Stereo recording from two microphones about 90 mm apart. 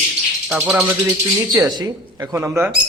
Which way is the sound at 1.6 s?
30° right (ahead or behind).